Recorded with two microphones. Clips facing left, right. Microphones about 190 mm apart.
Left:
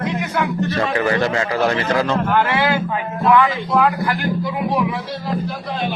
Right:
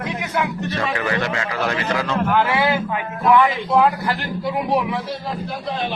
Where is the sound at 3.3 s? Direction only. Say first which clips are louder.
Right 2 dB; 20° right (ahead or behind).